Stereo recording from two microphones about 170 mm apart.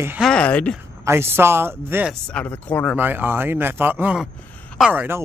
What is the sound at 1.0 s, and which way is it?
Speech, 15° right (ahead or behind).